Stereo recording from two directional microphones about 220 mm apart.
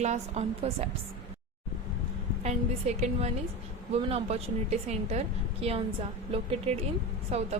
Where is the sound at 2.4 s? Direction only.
30° right (ahead or behind).